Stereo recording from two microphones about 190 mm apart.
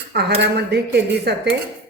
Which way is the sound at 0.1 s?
60° right (ahead or behind).